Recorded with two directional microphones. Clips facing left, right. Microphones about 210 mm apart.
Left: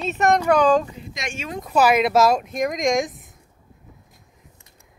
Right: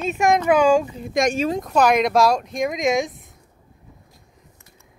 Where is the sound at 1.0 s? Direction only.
50° right (ahead or behind).